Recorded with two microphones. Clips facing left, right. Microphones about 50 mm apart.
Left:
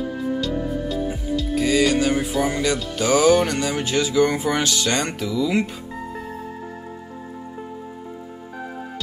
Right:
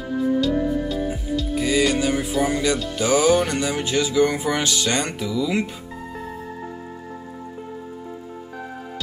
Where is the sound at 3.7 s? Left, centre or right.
Left.